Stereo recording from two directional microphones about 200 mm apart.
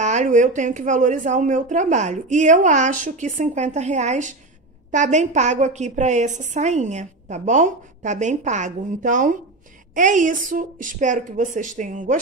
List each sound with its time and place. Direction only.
0.0 s a woman's voice: 35° right (ahead or behind)